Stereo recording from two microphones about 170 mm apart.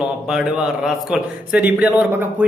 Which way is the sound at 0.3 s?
5° right (ahead or behind).